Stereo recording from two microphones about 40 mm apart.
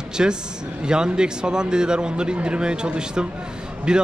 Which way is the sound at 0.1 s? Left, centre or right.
Centre.